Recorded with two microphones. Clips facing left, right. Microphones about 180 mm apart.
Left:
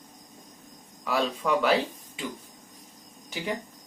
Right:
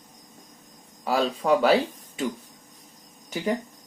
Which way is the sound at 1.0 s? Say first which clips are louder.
Right 4 dB; 35° right (ahead or behind).